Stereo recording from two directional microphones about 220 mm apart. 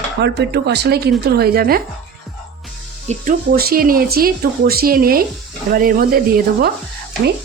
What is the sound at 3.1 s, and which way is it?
Speech, 40° right (ahead or behind).